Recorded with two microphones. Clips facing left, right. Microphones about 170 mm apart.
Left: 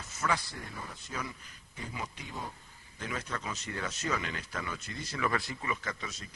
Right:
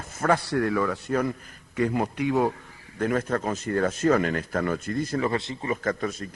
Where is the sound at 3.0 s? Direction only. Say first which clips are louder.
Right 13 dB; 50° right (ahead or behind).